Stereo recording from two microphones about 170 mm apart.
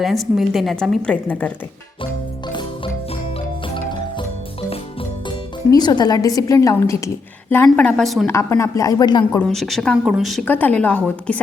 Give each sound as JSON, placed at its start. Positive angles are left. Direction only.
{"t": 0.0, "sound": "speech", "side_deg": 0}
{"t": 5.7, "sound": "a woman's voice", "side_deg": 25}
{"t": 8.3, "sound": "a woman's voice", "side_deg": 15}
{"t": 9.4, "sound": "speech", "side_deg": 0}